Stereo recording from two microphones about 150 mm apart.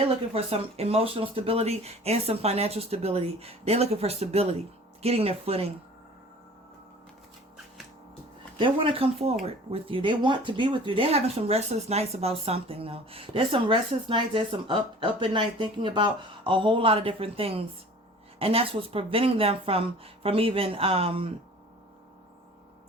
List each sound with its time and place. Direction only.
0.3 s speech: 40° right (ahead or behind)
8.5 s speech: 35° right (ahead or behind)